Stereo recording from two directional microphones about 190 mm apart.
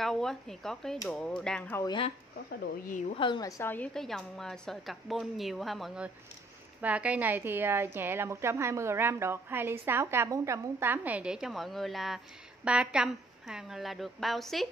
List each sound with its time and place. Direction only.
0.0 s a woman's voice: centre (ahead or behind)
1.9 s speech: 30° left (ahead or behind)
3.2 s a woman's voice: 25° left (ahead or behind); by 14.7 s centre (ahead or behind)